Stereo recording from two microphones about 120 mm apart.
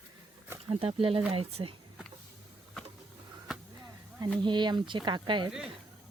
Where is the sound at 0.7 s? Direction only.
50° right (ahead or behind).